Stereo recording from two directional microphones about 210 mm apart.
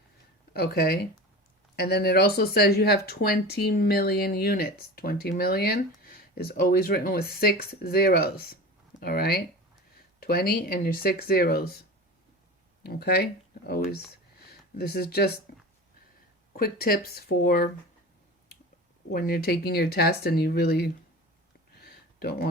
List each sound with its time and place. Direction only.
0.5 s speech: 45° left (ahead or behind)
12.8 s speech: 50° left (ahead or behind)
16.6 s speech: 45° left (ahead or behind)
19.1 s speech: 45° left (ahead or behind)
21.8 s a sound: 50° left (ahead or behind)